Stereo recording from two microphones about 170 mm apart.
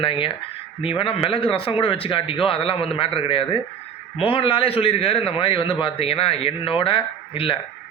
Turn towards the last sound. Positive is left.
turn(degrees=30)  # may be behind; listen again after turning